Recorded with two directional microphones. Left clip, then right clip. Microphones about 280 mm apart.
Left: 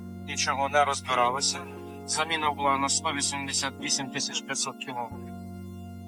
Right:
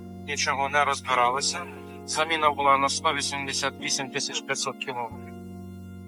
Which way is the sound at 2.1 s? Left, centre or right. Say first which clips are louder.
Right 4 dB; centre.